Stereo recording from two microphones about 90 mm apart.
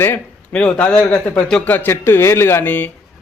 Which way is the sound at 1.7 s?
25° left (ahead or behind).